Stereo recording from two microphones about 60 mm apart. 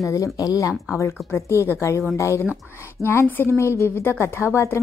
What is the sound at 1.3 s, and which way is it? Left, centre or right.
A woman's voice, left.